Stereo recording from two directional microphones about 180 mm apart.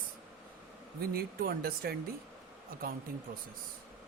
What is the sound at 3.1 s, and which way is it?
Speech, 55° right (ahead or behind).